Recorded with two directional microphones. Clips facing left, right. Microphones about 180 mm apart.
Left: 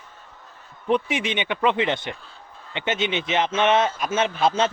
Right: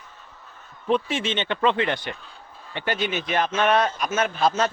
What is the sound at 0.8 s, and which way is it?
A man's voice, 15° left (ahead or behind).